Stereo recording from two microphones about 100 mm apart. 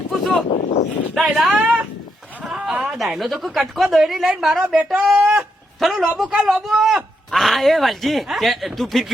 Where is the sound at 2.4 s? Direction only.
5° right (ahead or behind).